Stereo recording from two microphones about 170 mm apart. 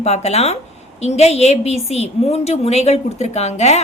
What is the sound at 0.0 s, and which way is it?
A woman's voice, 40° left (ahead or behind).